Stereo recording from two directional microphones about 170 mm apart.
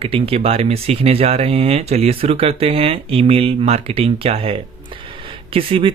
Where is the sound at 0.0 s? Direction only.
35° right (ahead or behind).